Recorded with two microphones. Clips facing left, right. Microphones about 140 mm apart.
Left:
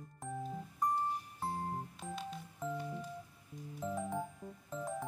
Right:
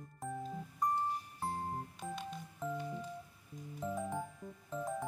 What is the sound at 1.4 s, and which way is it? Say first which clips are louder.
Music: left 1 dB; centre (ahead or behind).